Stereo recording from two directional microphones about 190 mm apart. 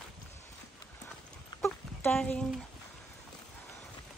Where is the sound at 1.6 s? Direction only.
5° left (ahead or behind).